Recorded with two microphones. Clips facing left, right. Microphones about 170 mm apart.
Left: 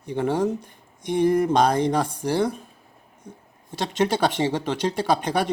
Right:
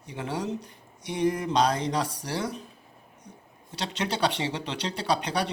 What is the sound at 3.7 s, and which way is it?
Speech, 50° left (ahead or behind).